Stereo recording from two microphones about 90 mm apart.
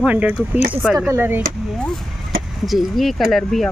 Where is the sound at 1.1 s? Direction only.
25° right (ahead or behind).